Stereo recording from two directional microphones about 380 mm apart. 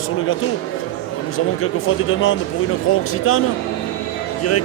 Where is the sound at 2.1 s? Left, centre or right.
Left.